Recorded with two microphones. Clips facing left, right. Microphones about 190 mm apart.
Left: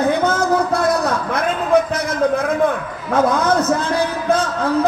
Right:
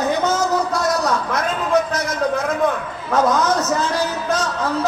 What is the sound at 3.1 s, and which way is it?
Speech, 55° left (ahead or behind).